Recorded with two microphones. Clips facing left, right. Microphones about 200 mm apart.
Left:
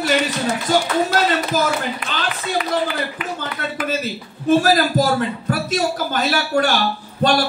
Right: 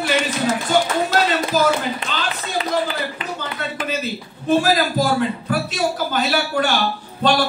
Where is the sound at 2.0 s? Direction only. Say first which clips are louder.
Right 1 dB; 25° right (ahead or behind).